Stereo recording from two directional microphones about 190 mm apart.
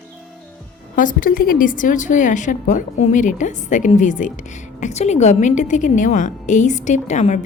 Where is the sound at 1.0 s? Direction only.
45° left (ahead or behind).